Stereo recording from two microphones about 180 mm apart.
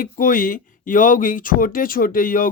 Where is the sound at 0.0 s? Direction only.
50° left (ahead or behind).